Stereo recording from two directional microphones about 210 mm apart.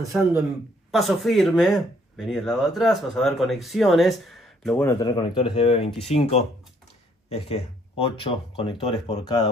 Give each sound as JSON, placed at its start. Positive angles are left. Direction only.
{"t": 0.9, "sound": "speech", "side_deg": 0}
{"t": 4.8, "sound": "speech", "side_deg": 20}